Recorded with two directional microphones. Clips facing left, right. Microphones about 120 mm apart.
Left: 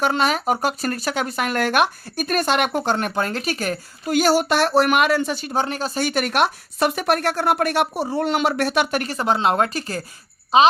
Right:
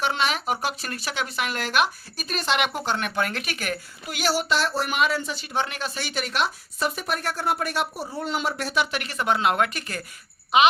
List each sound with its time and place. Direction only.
0.0 s speech: 45° left (ahead or behind)
5.5 s speech: 40° left (ahead or behind); by 8.9 s 65° left (ahead or behind)
8.9 s speech: 40° left (ahead or behind)